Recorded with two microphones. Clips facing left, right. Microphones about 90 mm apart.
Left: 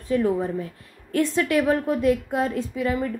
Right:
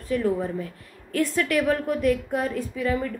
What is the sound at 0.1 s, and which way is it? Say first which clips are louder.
A woman's voice: left 2 dB; 25° left (ahead or behind).